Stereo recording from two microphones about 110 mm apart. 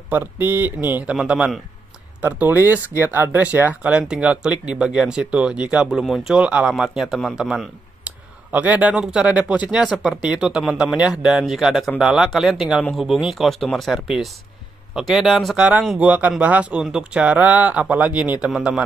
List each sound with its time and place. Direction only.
0.1 s speech: 20° right (ahead or behind)